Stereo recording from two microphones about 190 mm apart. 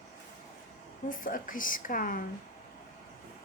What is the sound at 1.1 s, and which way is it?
A woman's voice, 45° left (ahead or behind).